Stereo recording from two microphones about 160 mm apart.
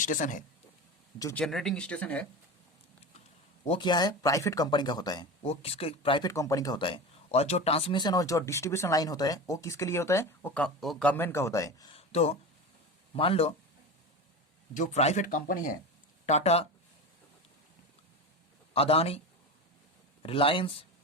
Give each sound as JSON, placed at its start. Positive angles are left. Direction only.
{"t": 0.0, "sound": "speech", "side_deg": 55}
{"t": 1.2, "sound": "speech", "side_deg": 15}
{"t": 1.5, "sound": "speech", "side_deg": 0}
{"t": 3.7, "sound": "speech", "side_deg": 30}
{"t": 5.4, "sound": "speech", "side_deg": 40}
{"t": 6.3, "sound": "speech", "side_deg": 20}
{"t": 11.9, "sound": "speech", "side_deg": 40}
{"t": 14.7, "sound": "speech", "side_deg": 50}
{"t": 16.2, "sound": "speech", "side_deg": 45}
{"t": 18.7, "sound": "speech", "side_deg": 40}
{"t": 20.2, "sound": "speech", "side_deg": 35}